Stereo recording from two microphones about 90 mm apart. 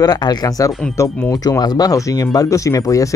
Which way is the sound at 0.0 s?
50° left (ahead or behind).